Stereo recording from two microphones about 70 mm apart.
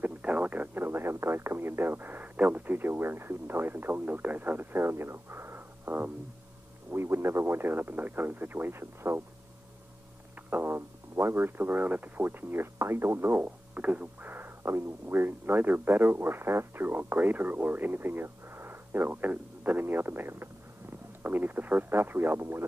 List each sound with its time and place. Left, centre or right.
0.0 s radio: right
6.9 s speech: right
10.5 s speech: right